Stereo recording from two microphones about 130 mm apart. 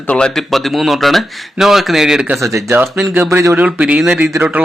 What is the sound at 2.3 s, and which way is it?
Speech, 25° right (ahead or behind).